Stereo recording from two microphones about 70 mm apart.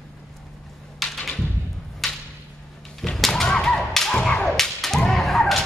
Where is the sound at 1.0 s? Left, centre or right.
Centre.